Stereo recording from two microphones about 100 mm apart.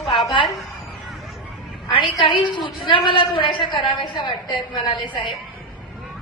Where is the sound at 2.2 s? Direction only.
55° left (ahead or behind).